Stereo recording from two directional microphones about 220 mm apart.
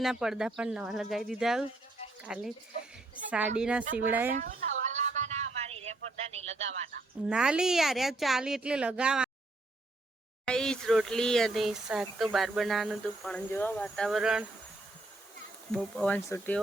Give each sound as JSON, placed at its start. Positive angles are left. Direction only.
{"t": 0.0, "sound": "speech", "side_deg": 0}
{"t": 4.4, "sound": "a sound", "side_deg": -35}
{"t": 7.3, "sound": "speech", "side_deg": -5}
{"t": 10.4, "sound": "speech", "side_deg": 5}
{"t": 15.7, "sound": "speech", "side_deg": 0}